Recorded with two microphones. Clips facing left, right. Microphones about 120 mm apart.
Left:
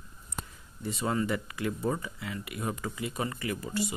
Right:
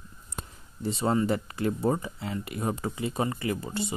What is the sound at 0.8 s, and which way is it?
Speech, 30° right (ahead or behind).